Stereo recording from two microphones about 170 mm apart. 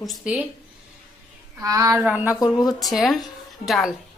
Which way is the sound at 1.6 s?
20° right (ahead or behind).